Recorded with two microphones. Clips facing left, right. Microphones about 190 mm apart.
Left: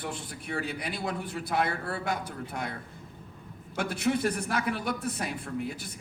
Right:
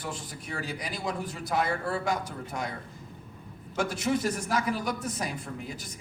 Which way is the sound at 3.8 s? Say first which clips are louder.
Even; 60° left (ahead or behind).